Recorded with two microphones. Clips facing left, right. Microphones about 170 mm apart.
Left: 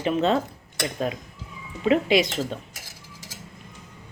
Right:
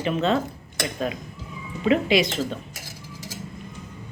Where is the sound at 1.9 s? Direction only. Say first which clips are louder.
Even; 40° left (ahead or behind).